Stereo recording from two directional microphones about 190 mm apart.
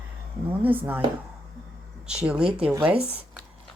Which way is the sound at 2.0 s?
5° right (ahead or behind).